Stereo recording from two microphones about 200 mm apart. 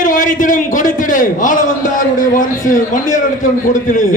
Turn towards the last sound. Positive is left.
turn(degrees=40)  # may be behind; listen again after turning